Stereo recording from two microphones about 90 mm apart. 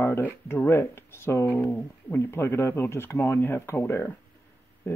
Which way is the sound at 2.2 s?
30° left (ahead or behind).